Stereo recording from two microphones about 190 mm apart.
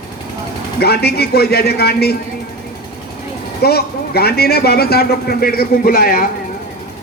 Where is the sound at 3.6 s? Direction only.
55° left (ahead or behind).